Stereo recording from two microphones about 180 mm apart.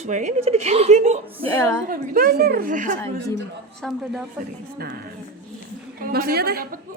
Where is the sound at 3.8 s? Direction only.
Centre (ahead or behind).